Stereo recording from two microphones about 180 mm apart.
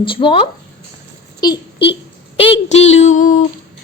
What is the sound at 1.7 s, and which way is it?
Speech, 70° left (ahead or behind).